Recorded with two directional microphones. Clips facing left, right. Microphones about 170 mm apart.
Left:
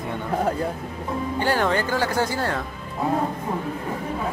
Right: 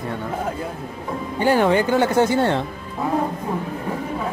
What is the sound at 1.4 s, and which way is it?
Speech, 15° right (ahead or behind).